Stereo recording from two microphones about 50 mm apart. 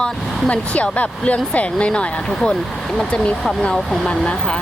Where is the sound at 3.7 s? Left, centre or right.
Centre.